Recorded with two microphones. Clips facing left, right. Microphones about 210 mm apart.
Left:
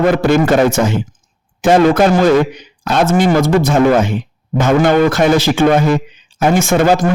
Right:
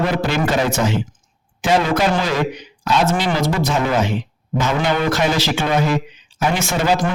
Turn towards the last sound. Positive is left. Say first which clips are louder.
# left 7 dB
turn(degrees=50)  # may be behind; listen again after turning